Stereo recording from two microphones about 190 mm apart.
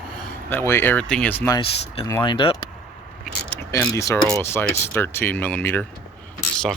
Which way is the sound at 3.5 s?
10° left (ahead or behind).